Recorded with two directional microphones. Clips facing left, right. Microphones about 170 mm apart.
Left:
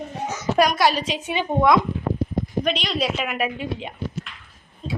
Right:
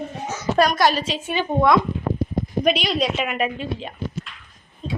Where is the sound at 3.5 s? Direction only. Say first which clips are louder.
Even; 15° left (ahead or behind).